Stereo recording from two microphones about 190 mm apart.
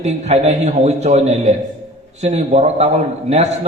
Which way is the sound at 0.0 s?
35° right (ahead or behind).